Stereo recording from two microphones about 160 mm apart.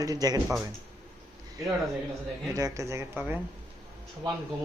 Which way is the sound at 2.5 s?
20° right (ahead or behind).